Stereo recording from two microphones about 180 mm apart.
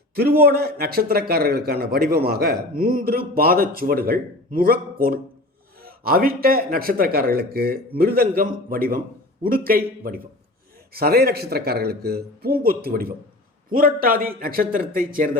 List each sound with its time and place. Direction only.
0.4 s a man's voice: 60° right (ahead or behind)